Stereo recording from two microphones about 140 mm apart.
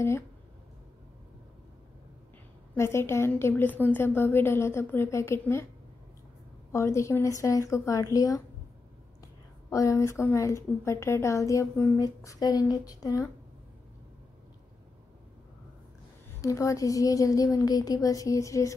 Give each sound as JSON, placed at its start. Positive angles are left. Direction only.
{"t": 2.7, "sound": "a woman's voice", "side_deg": 20}
{"t": 6.7, "sound": "a woman's voice", "side_deg": 20}
{"t": 9.7, "sound": "a woman's voice", "side_deg": 25}
{"t": 16.3, "sound": "a woman's voice", "side_deg": 25}